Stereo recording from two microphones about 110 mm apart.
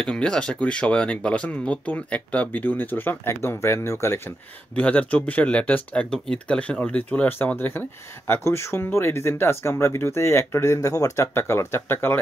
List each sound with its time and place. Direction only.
0.0 s speech: 5° left (ahead or behind); by 4.2 s 25° left (ahead or behind)
4.7 s speech: 15° left (ahead or behind)